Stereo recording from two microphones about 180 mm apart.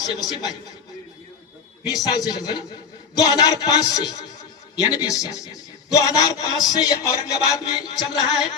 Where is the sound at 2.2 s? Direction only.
20° left (ahead or behind).